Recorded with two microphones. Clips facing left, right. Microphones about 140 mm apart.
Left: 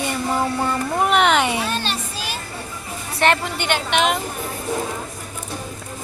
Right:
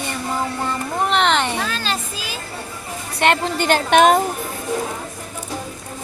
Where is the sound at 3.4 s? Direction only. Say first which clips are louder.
Right 5 dB; 35° right (ahead or behind).